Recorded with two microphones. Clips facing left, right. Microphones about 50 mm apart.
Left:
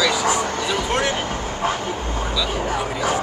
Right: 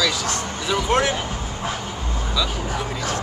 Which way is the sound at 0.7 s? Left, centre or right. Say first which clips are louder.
Right 4 dB; centre.